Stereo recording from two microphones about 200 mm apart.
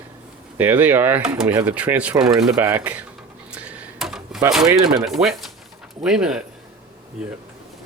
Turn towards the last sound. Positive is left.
turn(degrees=-5)  # may be behind; listen again after turning